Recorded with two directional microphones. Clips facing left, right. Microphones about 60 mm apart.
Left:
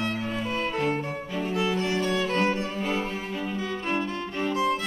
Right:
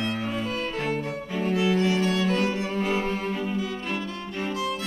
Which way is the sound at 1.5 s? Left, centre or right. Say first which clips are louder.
Right 3 dB; left.